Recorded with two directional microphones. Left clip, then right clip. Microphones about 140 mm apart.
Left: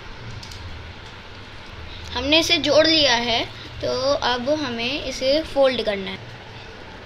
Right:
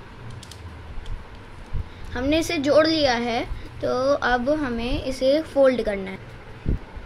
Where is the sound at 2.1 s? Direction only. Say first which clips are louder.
Left 5 dB; 65° right (ahead or behind).